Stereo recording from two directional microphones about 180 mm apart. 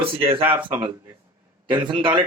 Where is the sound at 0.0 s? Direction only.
30° right (ahead or behind).